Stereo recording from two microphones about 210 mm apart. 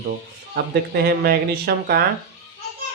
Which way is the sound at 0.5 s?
50° right (ahead or behind).